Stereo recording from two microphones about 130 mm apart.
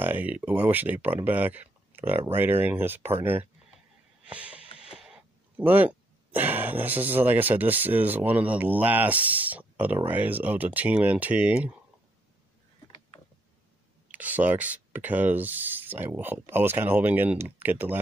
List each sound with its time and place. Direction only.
0.0 s speech: 15° right (ahead or behind)
4.3 s snort: 10° right (ahead or behind)
4.7 s a sound: 5° right (ahead or behind)
5.6 s speech: 15° right (ahead or behind)
14.1 s speech: 10° right (ahead or behind)